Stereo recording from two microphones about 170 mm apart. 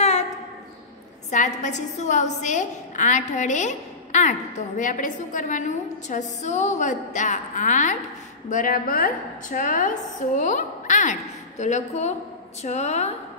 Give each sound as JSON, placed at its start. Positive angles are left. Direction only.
{"t": 1.3, "sound": "a woman's voice", "side_deg": 45}